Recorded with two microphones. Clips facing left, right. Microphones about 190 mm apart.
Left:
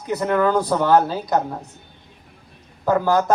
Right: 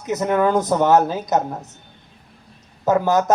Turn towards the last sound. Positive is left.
turn(degrees=-20)  # may be behind; listen again after turning